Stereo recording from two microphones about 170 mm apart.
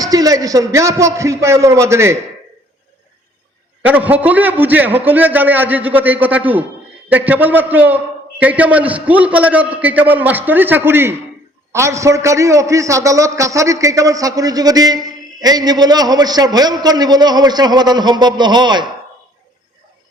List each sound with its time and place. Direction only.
0.0 s a man's voice: 20° right (ahead or behind)
3.8 s a man's voice: 10° right (ahead or behind); by 18.9 s 25° right (ahead or behind)